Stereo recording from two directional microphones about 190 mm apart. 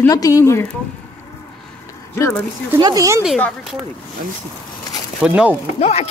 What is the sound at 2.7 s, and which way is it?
Speech, 20° right (ahead or behind).